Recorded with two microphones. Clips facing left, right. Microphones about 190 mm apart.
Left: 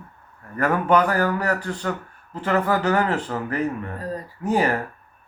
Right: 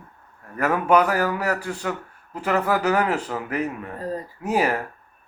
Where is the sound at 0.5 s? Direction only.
10° right (ahead or behind).